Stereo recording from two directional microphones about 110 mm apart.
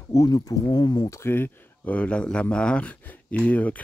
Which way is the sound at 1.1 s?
20° left (ahead or behind).